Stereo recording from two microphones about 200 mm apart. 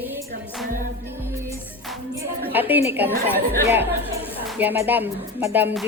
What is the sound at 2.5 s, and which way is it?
Speech, 10° right (ahead or behind).